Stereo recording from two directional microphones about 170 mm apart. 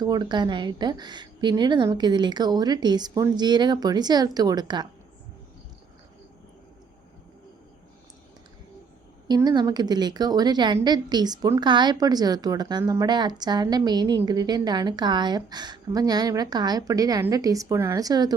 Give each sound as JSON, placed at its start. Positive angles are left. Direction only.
{"t": 0.0, "sound": "a woman's voice", "side_deg": -25}
{"t": 9.2, "sound": "a woman's voice", "side_deg": -25}